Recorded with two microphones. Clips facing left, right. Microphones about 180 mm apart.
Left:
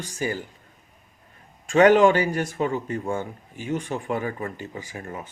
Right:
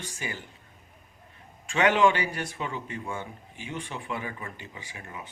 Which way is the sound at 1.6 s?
40° left (ahead or behind).